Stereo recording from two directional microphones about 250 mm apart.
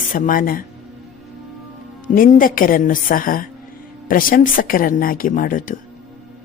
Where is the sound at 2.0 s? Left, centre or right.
Left.